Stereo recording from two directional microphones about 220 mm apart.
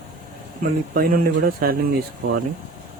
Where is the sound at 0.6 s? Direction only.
40° right (ahead or behind).